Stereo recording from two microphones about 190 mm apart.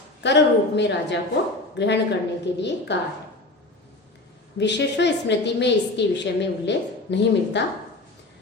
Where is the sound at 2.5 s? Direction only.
65° left (ahead or behind).